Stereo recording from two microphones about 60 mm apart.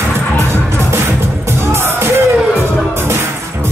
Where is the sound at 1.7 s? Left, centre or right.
Right.